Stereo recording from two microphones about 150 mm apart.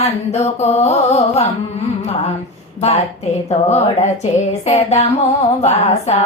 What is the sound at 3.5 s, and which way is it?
Female singing, 45° left (ahead or behind).